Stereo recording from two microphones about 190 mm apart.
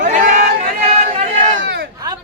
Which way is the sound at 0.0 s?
40° right (ahead or behind).